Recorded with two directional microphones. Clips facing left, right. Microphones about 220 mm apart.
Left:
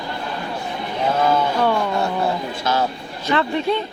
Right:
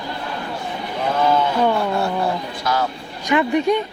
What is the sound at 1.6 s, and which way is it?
Music, 15° right (ahead or behind).